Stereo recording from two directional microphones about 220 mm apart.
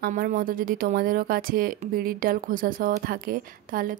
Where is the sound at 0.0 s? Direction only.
40° right (ahead or behind).